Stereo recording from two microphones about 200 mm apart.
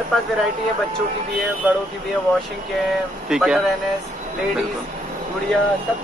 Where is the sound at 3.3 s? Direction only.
Centre (ahead or behind).